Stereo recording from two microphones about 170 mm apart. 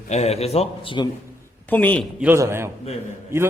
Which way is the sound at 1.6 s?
10° left (ahead or behind).